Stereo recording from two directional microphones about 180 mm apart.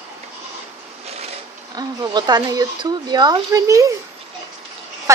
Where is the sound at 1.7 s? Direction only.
25° right (ahead or behind).